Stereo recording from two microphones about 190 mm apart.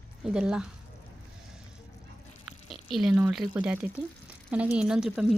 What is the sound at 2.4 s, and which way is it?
Speech, centre (ahead or behind).